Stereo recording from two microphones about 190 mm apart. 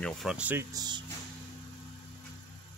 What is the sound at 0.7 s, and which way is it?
Speech, 20° right (ahead or behind).